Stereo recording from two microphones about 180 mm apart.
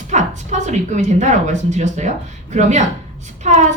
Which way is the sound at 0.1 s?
40° right (ahead or behind).